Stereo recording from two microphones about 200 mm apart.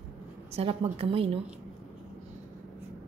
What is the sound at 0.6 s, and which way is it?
Speech, 30° right (ahead or behind).